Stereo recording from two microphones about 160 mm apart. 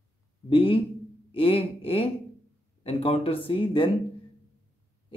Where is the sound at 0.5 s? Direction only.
35° left (ahead or behind).